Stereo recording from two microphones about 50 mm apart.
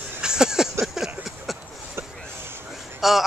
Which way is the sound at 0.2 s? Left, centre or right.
Centre.